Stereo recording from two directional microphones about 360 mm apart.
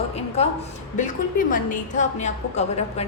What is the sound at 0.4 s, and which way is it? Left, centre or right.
A woman's voice, centre.